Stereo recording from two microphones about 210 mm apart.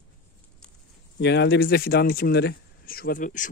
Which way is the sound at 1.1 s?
55° left (ahead or behind).